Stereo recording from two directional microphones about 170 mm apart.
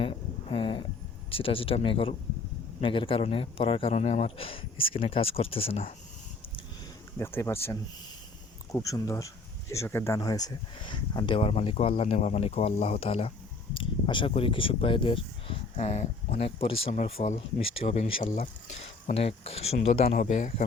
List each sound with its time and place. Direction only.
0.0 s a sound: 30° left (ahead or behind)
1.3 s a man's voice: 30° left (ahead or behind)
7.2 s a man's voice: 15° left (ahead or behind); by 18.4 s 50° left (ahead or behind)
19.0 s a man's voice: 35° left (ahead or behind)